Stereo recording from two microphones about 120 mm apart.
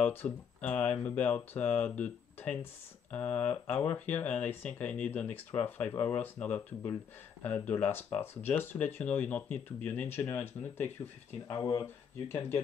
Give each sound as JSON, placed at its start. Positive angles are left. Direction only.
{"t": 0.0, "sound": "speech", "side_deg": 15}
{"t": 11.4, "sound": "speech", "side_deg": 30}